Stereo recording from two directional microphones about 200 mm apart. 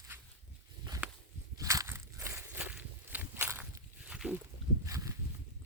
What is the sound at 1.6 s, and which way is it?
Walk, 15° right (ahead or behind).